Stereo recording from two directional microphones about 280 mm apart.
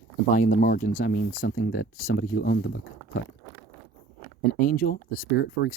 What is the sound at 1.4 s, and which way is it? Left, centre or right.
Speech, left.